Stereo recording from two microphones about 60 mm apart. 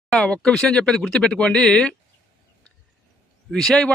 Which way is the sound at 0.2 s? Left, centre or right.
Centre.